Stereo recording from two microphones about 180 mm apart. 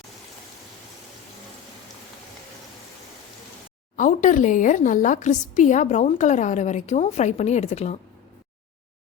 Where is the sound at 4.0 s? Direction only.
45° left (ahead or behind).